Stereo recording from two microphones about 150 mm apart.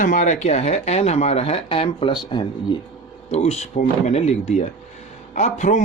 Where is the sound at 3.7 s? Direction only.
55° left (ahead or behind).